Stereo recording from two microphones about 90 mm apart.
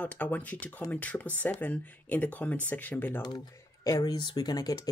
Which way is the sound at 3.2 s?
45° left (ahead or behind).